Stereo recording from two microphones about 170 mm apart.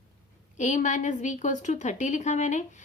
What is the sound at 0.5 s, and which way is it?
A woman's voice, 45° left (ahead or behind).